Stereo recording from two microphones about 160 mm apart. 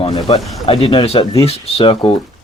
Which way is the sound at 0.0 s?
35° left (ahead or behind).